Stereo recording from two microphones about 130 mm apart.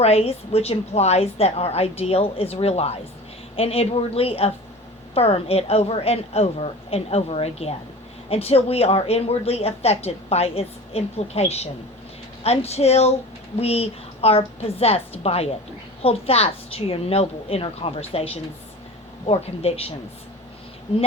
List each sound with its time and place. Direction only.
0.0 s a woman's voice: 50° left (ahead or behind)